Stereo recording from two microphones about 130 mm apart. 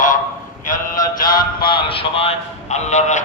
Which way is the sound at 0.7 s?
90° left.